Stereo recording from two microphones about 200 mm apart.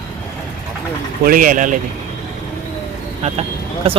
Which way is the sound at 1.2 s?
45° right (ahead or behind).